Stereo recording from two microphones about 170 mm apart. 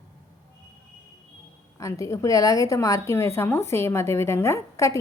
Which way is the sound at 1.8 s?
20° left (ahead or behind).